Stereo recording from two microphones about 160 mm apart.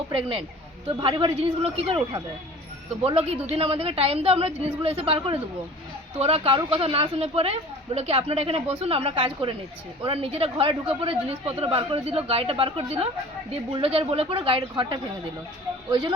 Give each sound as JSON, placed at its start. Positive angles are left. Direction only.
{"t": 0.1, "sound": "a woman's voice", "side_deg": -35}
{"t": 3.0, "sound": "a woman's voice", "side_deg": -35}